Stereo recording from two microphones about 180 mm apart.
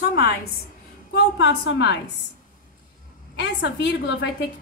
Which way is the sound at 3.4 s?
80° left.